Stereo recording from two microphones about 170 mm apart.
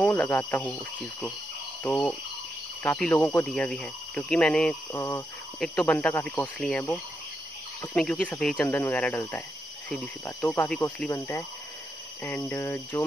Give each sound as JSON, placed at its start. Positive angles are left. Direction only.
{"t": 0.0, "sound": "speech", "side_deg": 10}
{"t": 4.9, "sound": "speech", "side_deg": 15}
{"t": 5.6, "sound": "speech", "side_deg": 5}